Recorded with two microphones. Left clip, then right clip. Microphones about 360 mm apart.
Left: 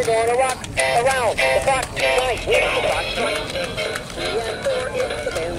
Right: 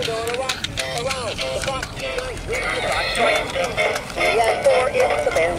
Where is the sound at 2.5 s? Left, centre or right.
Centre.